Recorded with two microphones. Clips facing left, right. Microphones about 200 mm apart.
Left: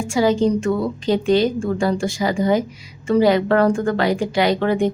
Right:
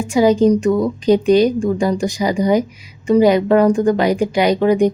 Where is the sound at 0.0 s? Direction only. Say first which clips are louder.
Right 4 dB; 20° right (ahead or behind).